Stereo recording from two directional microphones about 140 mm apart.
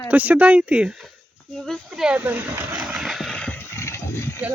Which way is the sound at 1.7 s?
5° right (ahead or behind).